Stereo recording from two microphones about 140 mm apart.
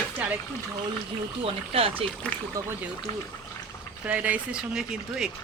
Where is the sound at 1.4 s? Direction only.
45° right (ahead or behind).